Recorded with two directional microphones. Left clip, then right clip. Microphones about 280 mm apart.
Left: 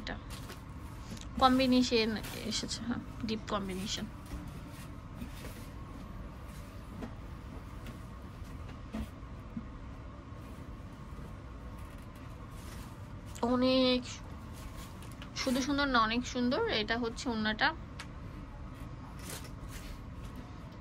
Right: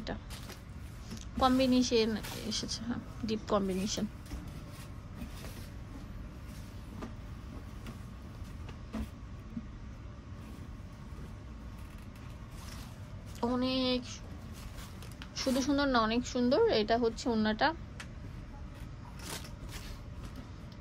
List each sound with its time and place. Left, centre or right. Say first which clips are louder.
1.1 s a woman's voice: left 2 dB; centre
13.4 s a sound: left 4 dB; centre
15.3 s a woman's voice: right 1 dB; centre